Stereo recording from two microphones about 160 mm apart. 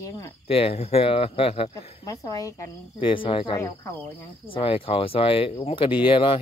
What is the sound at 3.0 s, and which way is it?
Speech, 30° left (ahead or behind).